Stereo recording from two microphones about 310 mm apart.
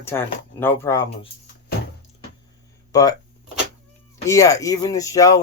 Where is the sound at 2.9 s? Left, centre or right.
Centre.